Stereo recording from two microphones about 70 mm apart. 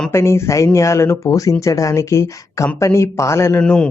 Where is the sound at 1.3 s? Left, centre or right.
Left.